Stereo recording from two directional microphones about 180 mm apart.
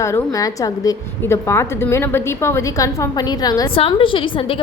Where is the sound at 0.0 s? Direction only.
15° left (ahead or behind).